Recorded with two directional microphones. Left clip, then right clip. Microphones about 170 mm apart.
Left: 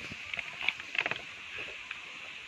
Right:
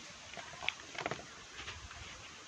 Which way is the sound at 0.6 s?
5° right (ahead or behind).